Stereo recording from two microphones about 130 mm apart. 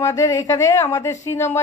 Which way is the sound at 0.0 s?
25° left (ahead or behind).